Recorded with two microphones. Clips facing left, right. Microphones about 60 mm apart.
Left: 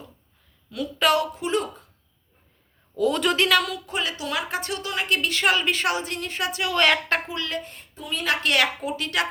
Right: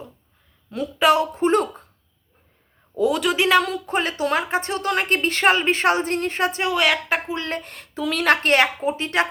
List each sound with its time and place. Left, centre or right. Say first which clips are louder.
0.9 s speech: right 4 dB; right
1.4 s a woman's voice: right 7 dB; right
3.1 s a woman's voice: right 1 dB; centre
3.3 s a woman's voice: right 3 dB; right
4.8 s a woman's voice: right 3 dB; right
6.7 s a woman's voice: left 2 dB; centre
7.3 s a woman's voice: right 3 dB; right
7.6 s speech: right 11 dB; right
8.4 s a woman's voice: right 4 dB; right